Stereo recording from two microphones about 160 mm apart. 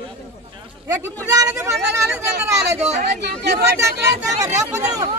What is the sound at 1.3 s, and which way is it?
Speech, 20° right (ahead or behind).